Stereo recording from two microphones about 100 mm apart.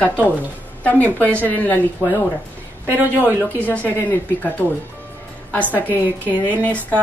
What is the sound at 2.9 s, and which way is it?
Speech, 20° right (ahead or behind).